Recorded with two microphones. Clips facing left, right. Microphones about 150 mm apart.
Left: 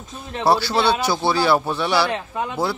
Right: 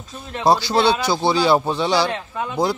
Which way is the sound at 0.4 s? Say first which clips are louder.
Right 2 dB; 15° right (ahead or behind).